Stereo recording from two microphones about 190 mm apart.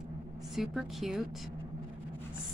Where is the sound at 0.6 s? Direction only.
Centre (ahead or behind).